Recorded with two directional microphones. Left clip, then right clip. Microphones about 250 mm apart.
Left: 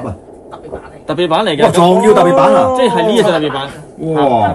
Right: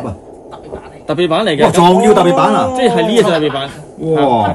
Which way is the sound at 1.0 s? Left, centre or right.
Left.